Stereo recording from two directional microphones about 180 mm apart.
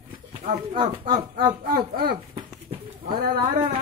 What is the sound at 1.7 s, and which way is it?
Speech, 55° right (ahead or behind).